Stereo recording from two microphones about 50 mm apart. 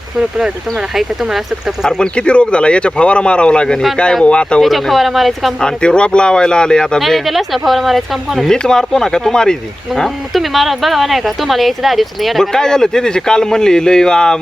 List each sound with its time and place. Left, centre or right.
0.2 s speech: centre
2.0 s speech: centre
4.6 s speech: centre
5.5 s speech: centre
7.0 s speech: centre
8.4 s speech: centre
9.9 s speech: centre
12.5 s speech: centre